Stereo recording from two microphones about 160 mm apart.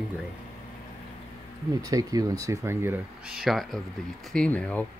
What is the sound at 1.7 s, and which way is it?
Speech, 20° right (ahead or behind).